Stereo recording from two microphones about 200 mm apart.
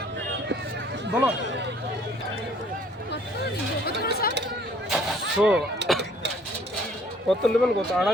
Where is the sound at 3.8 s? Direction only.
50° left (ahead or behind).